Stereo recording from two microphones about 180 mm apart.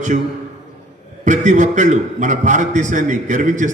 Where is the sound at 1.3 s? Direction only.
40° right (ahead or behind).